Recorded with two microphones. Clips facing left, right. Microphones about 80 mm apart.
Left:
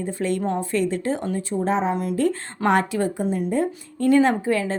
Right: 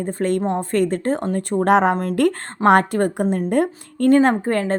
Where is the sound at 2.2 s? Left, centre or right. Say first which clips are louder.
Right 4 dB; right.